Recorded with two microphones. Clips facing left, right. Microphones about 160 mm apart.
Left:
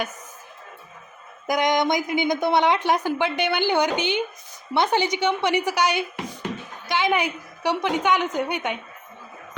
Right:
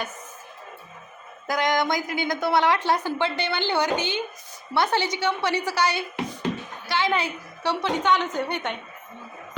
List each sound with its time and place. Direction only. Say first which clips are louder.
1.5 s a woman's voice: left 3 dB; 20° left (ahead or behind)